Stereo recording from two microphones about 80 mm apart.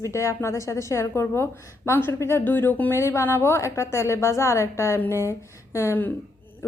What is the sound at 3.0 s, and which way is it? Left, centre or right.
A woman's voice, left.